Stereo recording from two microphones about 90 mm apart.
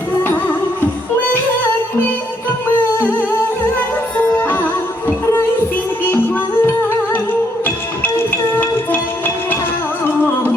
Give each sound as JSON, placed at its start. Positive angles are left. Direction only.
{"t": 3.0, "sound": "music", "side_deg": 20}
{"t": 6.1, "sound": "music", "side_deg": 20}